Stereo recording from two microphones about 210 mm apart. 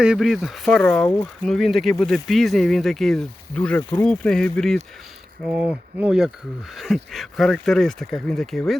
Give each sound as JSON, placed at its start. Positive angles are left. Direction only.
{"t": 0.0, "sound": "speech", "side_deg": -5}